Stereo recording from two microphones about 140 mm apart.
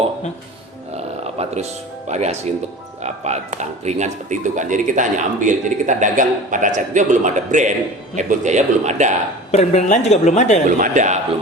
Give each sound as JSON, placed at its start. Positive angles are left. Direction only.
{"t": 0.9, "sound": "a sound", "side_deg": -50}
{"t": 2.0, "sound": "speech", "side_deg": -55}
{"t": 9.5, "sound": "a woman's voice", "side_deg": 50}
{"t": 10.8, "sound": "speech", "side_deg": -65}